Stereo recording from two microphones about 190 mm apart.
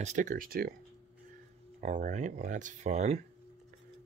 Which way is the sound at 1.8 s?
40° right (ahead or behind).